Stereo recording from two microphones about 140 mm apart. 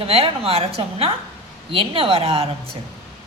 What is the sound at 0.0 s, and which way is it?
A woman's voice, 45° right (ahead or behind).